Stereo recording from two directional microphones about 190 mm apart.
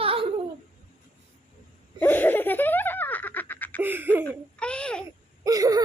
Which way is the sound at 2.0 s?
10° left (ahead or behind).